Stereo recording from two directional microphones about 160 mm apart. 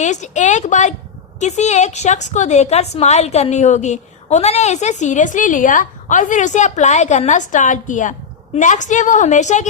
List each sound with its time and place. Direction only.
0.0 s a woman's voice: 50° left (ahead or behind)